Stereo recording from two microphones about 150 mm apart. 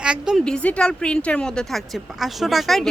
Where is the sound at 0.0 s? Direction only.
5° right (ahead or behind).